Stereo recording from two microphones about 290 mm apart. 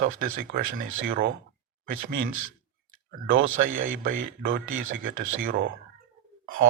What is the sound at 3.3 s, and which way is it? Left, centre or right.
Speech, right.